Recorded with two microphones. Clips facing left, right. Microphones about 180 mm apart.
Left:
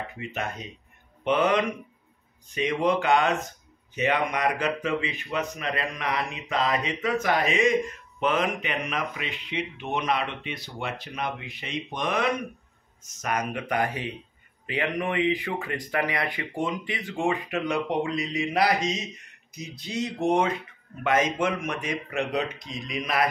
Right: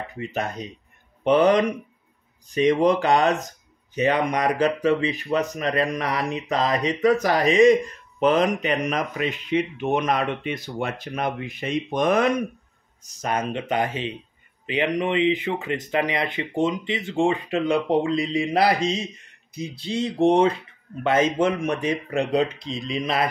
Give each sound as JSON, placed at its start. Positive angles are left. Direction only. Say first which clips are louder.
{"t": 0.1, "sound": "speech", "louder": "right 5 dB", "side_deg": -35}
{"t": 13.0, "sound": "speech", "louder": "right 3 dB", "side_deg": -35}